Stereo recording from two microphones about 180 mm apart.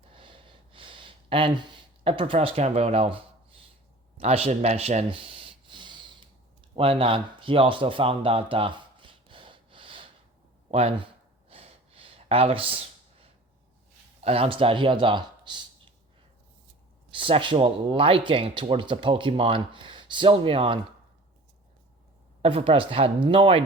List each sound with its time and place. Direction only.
0.1 s a sound: 30° right (ahead or behind)
14.3 s speech: 30° right (ahead or behind)
17.2 s speech: 30° right (ahead or behind)
22.4 s speech: 30° right (ahead or behind)